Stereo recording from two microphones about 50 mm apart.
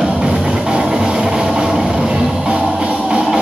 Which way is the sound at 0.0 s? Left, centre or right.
Right.